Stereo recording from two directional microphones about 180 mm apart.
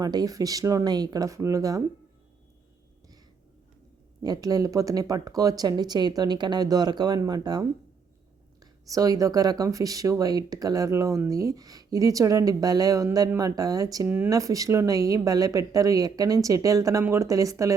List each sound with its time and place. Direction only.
0.0 s speech: 20° right (ahead or behind)
4.2 s speech: 20° right (ahead or behind)
8.9 s speech: 20° right (ahead or behind)